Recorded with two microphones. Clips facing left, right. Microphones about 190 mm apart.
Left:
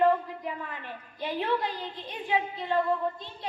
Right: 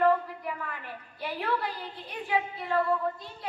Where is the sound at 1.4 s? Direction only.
25° left (ahead or behind).